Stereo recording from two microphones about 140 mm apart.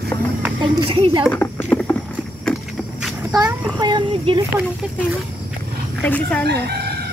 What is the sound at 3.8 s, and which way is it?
Speech, 30° right (ahead or behind).